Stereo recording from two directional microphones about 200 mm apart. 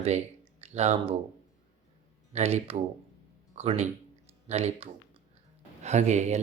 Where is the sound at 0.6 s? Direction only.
35° right (ahead or behind).